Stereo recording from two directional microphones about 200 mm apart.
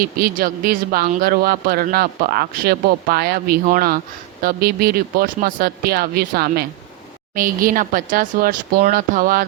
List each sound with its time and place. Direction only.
0.0 s speech: 50° right (ahead or behind)